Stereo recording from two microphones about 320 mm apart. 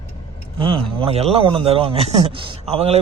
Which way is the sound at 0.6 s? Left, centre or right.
Centre.